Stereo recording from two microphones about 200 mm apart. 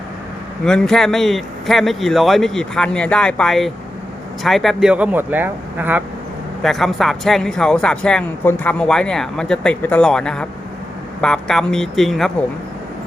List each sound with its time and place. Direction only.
0.6 s speech: 5° left (ahead or behind)